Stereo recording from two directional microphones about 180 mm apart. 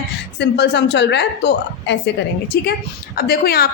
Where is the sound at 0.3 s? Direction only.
70° left (ahead or behind).